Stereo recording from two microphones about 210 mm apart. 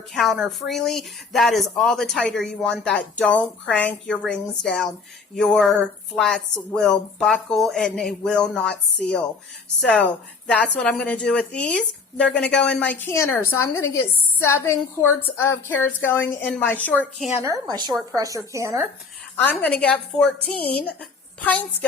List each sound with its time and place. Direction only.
0.1 s a woman's voice: centre (ahead or behind)
17.4 s a woman's voice: 15° right (ahead or behind)
19.5 s a woman's voice: 5° left (ahead or behind)